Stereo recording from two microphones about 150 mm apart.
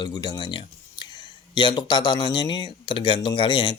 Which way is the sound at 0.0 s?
30° left (ahead or behind).